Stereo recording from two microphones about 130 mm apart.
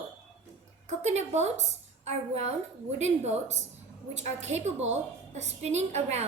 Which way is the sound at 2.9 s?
60° right (ahead or behind).